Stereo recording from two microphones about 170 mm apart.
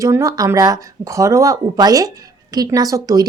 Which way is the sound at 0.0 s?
20° right (ahead or behind).